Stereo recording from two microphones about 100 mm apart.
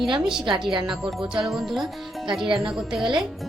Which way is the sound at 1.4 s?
Centre (ahead or behind).